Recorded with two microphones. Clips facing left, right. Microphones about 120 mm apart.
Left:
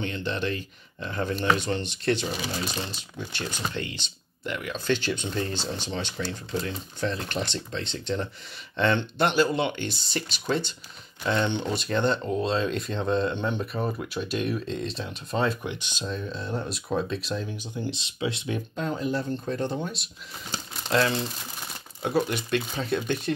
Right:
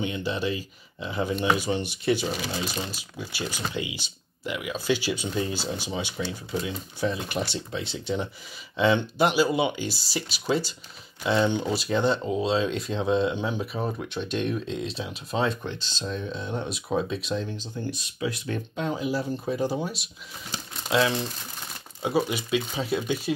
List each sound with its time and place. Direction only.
0.0 s speech: 10° right (ahead or behind)
15.6 s speech: 15° left (ahead or behind)
16.1 s speech: centre (ahead or behind)
17.6 s speech: 15° left (ahead or behind)
18.8 s speech: 5° right (ahead or behind)